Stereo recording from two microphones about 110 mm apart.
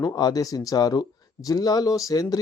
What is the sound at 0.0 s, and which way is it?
Speech, 35° left (ahead or behind).